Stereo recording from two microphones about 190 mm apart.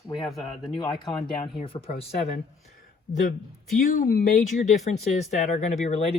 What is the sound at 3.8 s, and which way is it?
Speech, 45° left (ahead or behind).